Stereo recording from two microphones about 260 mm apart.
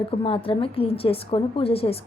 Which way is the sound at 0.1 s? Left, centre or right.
Left.